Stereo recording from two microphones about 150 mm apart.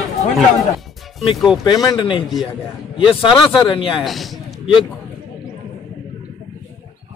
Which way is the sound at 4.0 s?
Centre (ahead or behind).